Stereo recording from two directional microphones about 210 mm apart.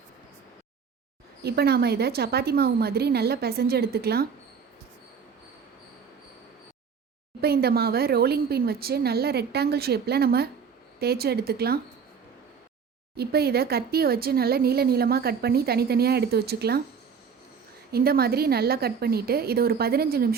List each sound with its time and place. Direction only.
1.4 s speech: 50° right (ahead or behind)
7.4 s speech: 45° right (ahead or behind)
13.1 s speech: 50° right (ahead or behind)
17.9 s speech: 45° right (ahead or behind)